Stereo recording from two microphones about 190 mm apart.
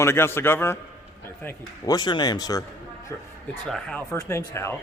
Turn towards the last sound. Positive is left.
turn(degrees=15)  # may be behind; listen again after turning